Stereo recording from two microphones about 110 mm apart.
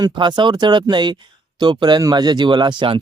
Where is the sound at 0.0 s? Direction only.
45° right (ahead or behind).